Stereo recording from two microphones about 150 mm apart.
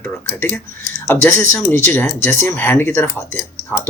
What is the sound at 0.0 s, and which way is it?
Speech, 15° left (ahead or behind).